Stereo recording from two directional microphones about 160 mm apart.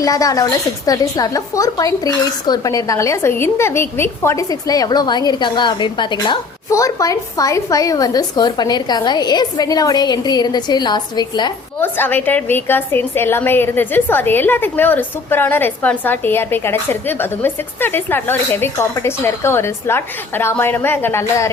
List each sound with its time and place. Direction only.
0.0 s speech: 20° left (ahead or behind)
11.8 s a woman's voice: 10° left (ahead or behind)